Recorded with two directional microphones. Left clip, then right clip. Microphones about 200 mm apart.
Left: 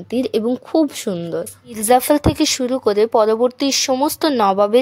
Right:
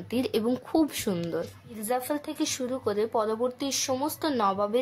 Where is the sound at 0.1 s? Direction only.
30° left (ahead or behind).